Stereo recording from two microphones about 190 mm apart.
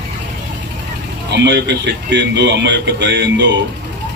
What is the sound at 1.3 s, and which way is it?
Speech, 65° right (ahead or behind).